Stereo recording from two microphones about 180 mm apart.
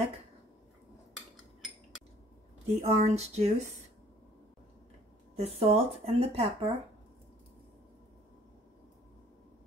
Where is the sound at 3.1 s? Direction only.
35° right (ahead or behind).